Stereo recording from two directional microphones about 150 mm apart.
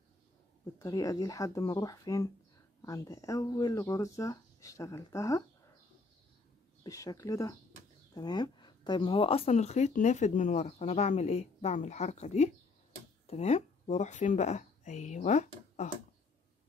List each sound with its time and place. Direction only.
0.7 s speech: 20° left (ahead or behind)
6.8 s speech: 25° left (ahead or behind); by 15.9 s 50° left (ahead or behind)